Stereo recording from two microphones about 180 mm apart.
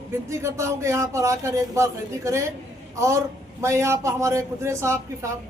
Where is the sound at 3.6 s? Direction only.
15° right (ahead or behind).